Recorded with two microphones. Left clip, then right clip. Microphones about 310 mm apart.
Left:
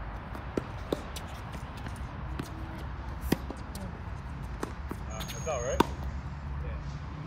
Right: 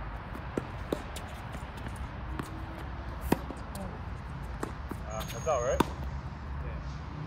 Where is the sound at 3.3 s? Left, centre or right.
Centre.